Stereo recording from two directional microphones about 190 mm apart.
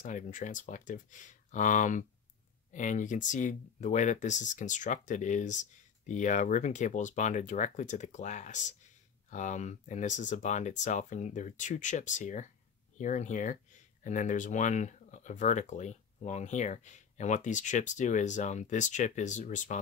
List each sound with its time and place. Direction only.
0.0 s speech: 40° left (ahead or behind)